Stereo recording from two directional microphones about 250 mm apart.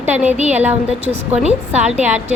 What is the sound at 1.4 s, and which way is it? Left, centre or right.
Speech, right.